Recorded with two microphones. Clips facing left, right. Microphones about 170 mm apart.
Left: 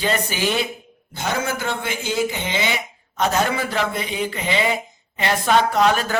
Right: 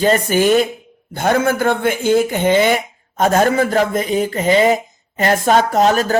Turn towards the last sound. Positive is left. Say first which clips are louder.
# right 4 dB
turn(degrees=-40)  # may be behind; listen again after turning